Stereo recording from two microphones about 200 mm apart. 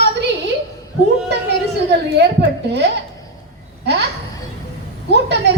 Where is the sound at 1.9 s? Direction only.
55° right (ahead or behind).